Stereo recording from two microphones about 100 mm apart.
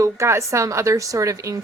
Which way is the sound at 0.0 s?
30° right (ahead or behind).